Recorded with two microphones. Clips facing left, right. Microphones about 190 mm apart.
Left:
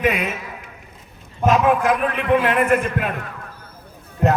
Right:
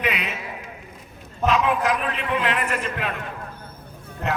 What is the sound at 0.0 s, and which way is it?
Speech, 45° left (ahead or behind).